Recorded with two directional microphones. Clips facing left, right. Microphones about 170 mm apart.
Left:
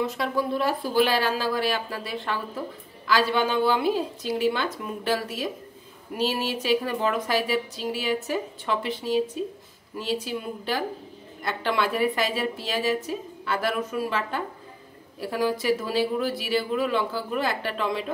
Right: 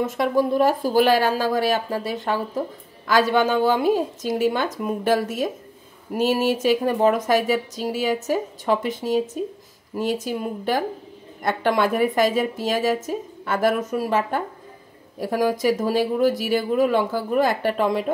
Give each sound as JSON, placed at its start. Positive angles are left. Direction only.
{"t": 0.0, "sound": "a woman's voice", "side_deg": -45}